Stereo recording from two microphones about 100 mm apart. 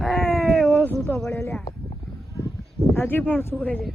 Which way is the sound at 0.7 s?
20° left (ahead or behind).